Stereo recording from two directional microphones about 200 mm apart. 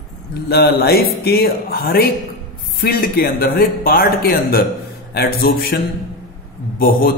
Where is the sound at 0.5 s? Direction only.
50° left (ahead or behind).